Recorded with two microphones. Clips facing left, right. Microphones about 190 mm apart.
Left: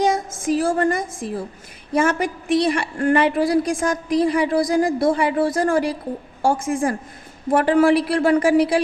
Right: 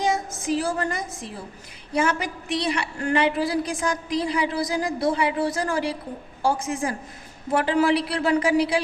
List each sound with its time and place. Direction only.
0.6 s a woman's voice: 50° left (ahead or behind)